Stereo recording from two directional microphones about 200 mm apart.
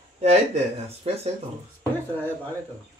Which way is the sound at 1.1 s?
30° right (ahead or behind).